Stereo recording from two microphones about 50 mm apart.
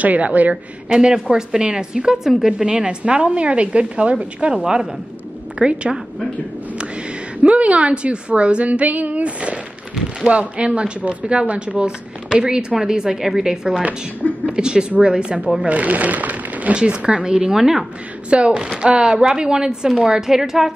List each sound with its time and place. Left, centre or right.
0.0 s speech: right
0.8 s speech: centre
7.4 s speech: right
16.7 s speech: centre
18.3 s speech: centre